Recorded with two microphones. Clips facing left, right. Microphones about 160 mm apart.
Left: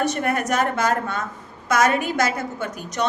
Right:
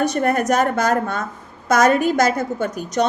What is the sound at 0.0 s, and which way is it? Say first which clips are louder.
A woman's voice: right 4 dB; 40° right (ahead or behind).